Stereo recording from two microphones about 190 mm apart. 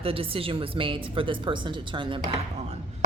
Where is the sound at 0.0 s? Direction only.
30° right (ahead or behind).